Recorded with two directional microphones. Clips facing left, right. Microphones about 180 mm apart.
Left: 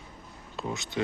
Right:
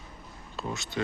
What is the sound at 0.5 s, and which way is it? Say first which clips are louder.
Speech: left 1 dB; 20° left (ahead or behind).